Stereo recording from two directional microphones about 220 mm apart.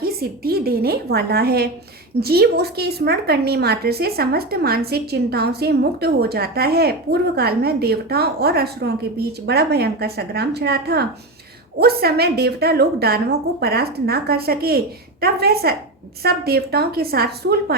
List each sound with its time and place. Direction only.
0.0 s a woman's voice: 45° right (ahead or behind)